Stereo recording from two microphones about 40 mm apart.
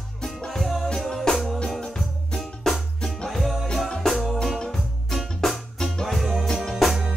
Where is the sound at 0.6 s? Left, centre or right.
Centre.